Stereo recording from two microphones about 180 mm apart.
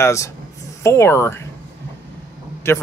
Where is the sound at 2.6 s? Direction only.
15° left (ahead or behind).